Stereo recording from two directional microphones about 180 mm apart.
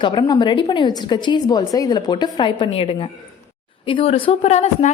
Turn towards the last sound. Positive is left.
turn(degrees=35)  # may be behind; listen again after turning